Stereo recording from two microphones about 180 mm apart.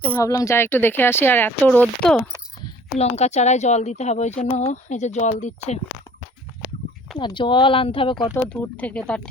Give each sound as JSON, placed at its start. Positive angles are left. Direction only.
{"t": 0.1, "sound": "speech", "side_deg": 15}
{"t": 3.0, "sound": "speech", "side_deg": 35}
{"t": 7.2, "sound": "speech", "side_deg": 25}
{"t": 8.3, "sound": "speech", "side_deg": 5}